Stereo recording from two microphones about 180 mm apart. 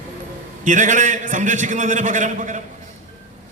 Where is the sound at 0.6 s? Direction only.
45° right (ahead or behind).